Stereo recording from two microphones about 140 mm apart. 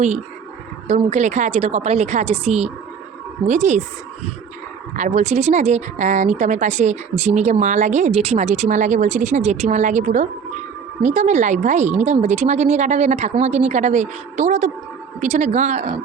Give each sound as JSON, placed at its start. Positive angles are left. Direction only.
{"t": 0.9, "sound": "a woman's voice", "side_deg": -60}
{"t": 4.9, "sound": "speech", "side_deg": -60}